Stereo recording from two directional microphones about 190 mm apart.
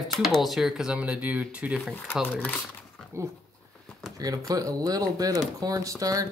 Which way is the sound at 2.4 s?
10° left (ahead or behind).